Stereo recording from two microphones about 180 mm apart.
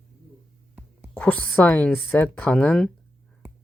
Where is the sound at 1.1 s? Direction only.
5° left (ahead or behind).